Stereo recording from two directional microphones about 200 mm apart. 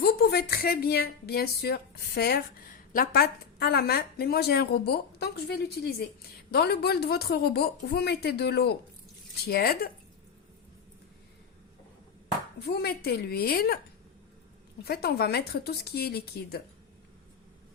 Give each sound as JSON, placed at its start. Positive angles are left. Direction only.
{"t": 0.0, "sound": "a woman's voice", "side_deg": 50}
{"t": 12.5, "sound": "a woman's voice", "side_deg": 55}
{"t": 14.8, "sound": "a woman's voice", "side_deg": 50}